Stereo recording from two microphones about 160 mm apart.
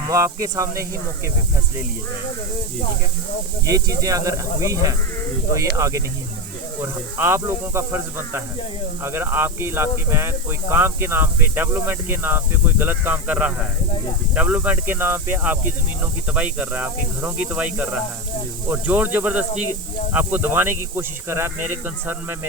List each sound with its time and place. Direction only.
0.1 s speech: 20° right (ahead or behind)
3.7 s speech: 20° right (ahead or behind)